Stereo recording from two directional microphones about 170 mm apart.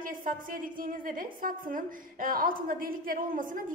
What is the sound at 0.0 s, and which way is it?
A woman's voice, 55° right (ahead or behind).